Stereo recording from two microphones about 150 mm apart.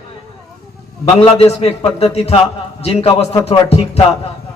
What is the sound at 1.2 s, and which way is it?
Speech, 40° left (ahead or behind).